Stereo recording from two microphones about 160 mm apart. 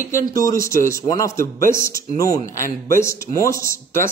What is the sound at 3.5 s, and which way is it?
Speech, 60° right (ahead or behind).